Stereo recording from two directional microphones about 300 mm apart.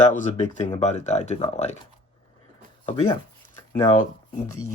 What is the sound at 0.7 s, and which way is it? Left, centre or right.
Speech, left.